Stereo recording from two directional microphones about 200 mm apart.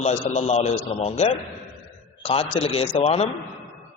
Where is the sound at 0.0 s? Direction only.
35° left (ahead or behind).